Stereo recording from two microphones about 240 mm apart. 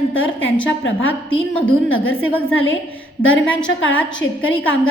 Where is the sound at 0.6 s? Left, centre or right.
Left.